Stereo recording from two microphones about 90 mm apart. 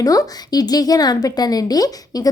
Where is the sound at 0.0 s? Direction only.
40° left (ahead or behind).